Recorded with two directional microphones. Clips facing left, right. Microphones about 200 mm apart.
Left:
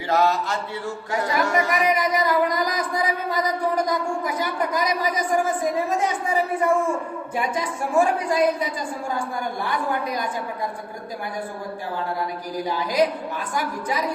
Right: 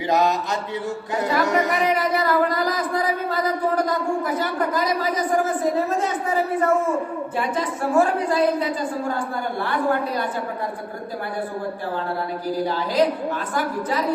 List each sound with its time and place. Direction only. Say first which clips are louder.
0.1 s mantra: even; 20° right (ahead or behind)
1.5 s speech: right 1 dB; 15° left (ahead or behind)
12.5 s speech: right 4 dB; 15° left (ahead or behind)